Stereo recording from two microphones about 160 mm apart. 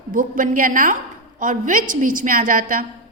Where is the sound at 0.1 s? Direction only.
55° right (ahead or behind).